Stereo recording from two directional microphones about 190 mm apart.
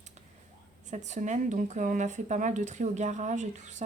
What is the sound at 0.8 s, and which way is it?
Speech, 40° right (ahead or behind).